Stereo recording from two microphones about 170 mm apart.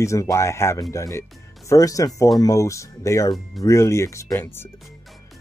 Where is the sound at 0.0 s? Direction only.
15° left (ahead or behind).